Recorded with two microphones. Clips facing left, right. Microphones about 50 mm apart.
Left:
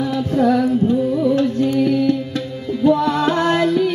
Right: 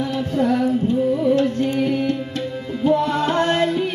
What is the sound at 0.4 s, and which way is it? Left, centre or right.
Music, left.